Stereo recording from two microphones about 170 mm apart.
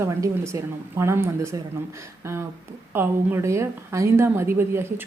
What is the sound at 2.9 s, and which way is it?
Speech, 15° right (ahead or behind).